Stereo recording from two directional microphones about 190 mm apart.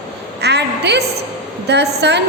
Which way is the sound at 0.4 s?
60° right (ahead or behind).